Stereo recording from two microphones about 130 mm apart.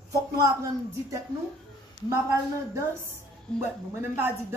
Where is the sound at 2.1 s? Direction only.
20° right (ahead or behind).